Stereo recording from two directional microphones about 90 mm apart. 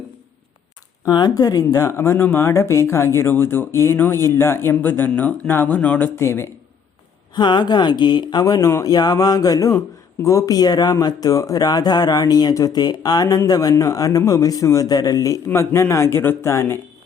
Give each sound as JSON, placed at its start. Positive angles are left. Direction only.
{"t": 1.0, "sound": "speech", "side_deg": 45}
{"t": 6.1, "sound": "speech", "side_deg": 25}
{"t": 7.3, "sound": "speech", "side_deg": 55}
{"t": 15.4, "sound": "speech", "side_deg": 30}